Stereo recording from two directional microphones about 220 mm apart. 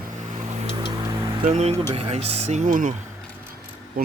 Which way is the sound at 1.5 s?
30° right (ahead or behind).